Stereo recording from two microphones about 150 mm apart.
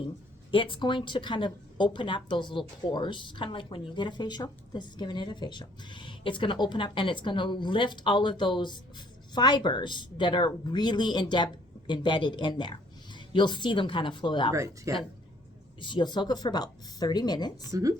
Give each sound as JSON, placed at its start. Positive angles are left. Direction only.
{"t": 0.5, "sound": "speech", "side_deg": 35}
{"t": 14.5, "sound": "speech", "side_deg": -20}
{"t": 15.8, "sound": "speech", "side_deg": 30}
{"t": 17.7, "sound": "speech", "side_deg": -20}